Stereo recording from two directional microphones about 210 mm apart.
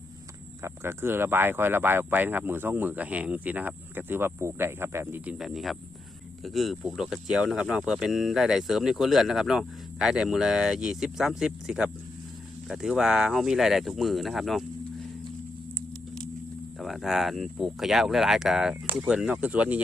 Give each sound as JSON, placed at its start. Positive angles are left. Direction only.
{"t": 0.6, "sound": "speech", "side_deg": -10}
{"t": 16.8, "sound": "speech", "side_deg": 0}